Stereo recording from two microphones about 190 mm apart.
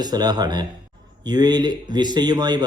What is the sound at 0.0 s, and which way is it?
Speech, 20° right (ahead or behind).